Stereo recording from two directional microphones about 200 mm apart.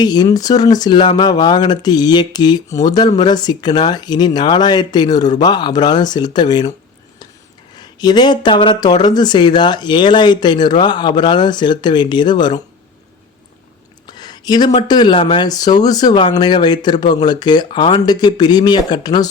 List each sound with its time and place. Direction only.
0.0 s speech: 20° left (ahead or behind)
7.8 s speech: 20° left (ahead or behind)
14.1 s a sound: 20° left (ahead or behind)
14.8 s speech: 20° left (ahead or behind)